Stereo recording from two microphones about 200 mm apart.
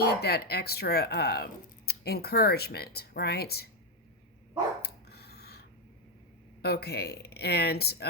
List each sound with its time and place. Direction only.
0.0 s speech: 50° left (ahead or behind)
4.8 s a sound: 55° left (ahead or behind)
6.6 s speech: 55° left (ahead or behind)